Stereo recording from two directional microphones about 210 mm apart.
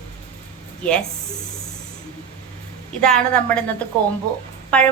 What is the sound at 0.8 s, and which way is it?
Speech, 5° left (ahead or behind).